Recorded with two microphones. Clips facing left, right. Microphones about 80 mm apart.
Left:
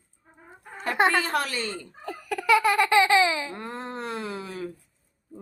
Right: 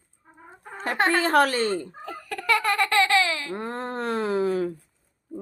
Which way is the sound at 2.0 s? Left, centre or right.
Centre.